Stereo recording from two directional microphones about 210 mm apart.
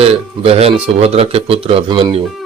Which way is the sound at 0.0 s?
30° right (ahead or behind).